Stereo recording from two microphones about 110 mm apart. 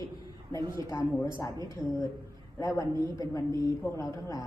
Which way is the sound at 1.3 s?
30° left (ahead or behind).